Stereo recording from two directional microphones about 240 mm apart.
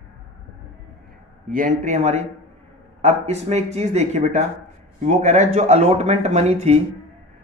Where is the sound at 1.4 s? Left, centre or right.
Right.